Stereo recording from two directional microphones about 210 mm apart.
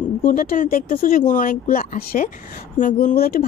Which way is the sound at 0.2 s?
40° left (ahead or behind).